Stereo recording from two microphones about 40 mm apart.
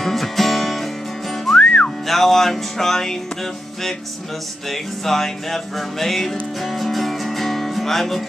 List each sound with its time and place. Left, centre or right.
0.0 s music: centre
1.6 s whistling: left
2.0 s music: centre
4.6 s music: centre